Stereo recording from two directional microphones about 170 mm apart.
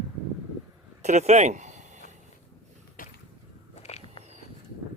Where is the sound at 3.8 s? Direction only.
40° left (ahead or behind).